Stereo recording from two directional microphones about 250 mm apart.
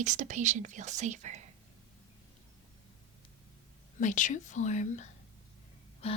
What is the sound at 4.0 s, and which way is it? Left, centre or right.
Speech, left.